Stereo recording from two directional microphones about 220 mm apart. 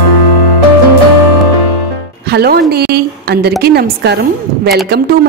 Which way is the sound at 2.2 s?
45° right (ahead or behind).